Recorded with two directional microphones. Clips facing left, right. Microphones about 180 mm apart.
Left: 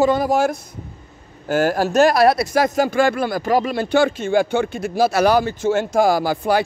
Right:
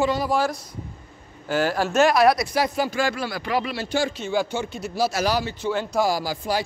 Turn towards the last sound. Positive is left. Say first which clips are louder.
# left 7 dB
turn(degrees=60)  # may be behind; listen again after turning